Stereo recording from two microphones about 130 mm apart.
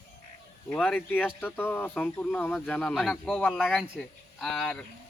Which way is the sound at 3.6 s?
5° right (ahead or behind).